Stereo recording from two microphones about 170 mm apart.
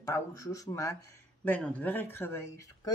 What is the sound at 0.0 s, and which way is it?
Speech, 20° left (ahead or behind).